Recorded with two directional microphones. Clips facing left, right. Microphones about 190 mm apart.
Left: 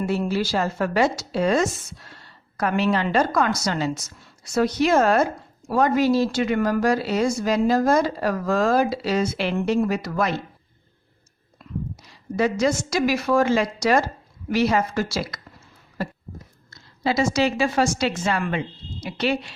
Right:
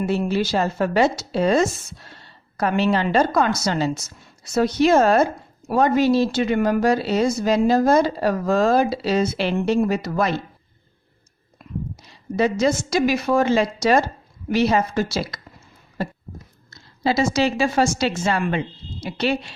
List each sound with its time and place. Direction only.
0.3 s speech: 20° right (ahead or behind)
12.0 s speech: 25° right (ahead or behind)
16.6 s a woman's voice: 30° right (ahead or behind)